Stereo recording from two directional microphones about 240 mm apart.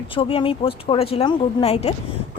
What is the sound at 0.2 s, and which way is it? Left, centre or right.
Speech, left.